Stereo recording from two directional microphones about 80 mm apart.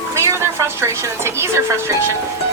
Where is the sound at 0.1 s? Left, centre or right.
Right.